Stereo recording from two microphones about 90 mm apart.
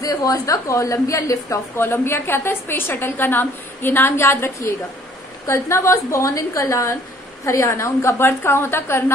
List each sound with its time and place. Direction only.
0.0 s a woman's voice: 45° left (ahead or behind); by 9.0 s 30° left (ahead or behind)